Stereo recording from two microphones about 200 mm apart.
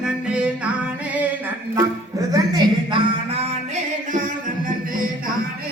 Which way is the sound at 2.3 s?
20° right (ahead or behind).